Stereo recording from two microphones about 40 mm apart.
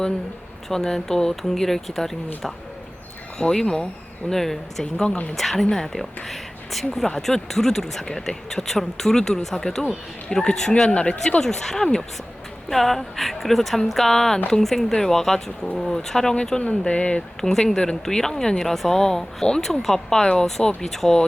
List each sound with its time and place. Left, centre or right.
0.7 s a woman's voice: centre
5.3 s a woman's voice: centre
10.8 s speech: left
11.3 s a woman's voice: centre
16.6 s speech: left
17.4 s a woman's voice: centre